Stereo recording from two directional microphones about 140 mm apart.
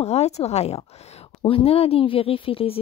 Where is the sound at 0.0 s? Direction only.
50° left (ahead or behind).